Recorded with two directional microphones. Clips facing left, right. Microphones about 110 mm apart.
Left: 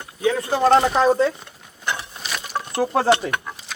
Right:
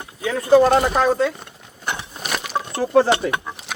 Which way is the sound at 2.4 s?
90° right.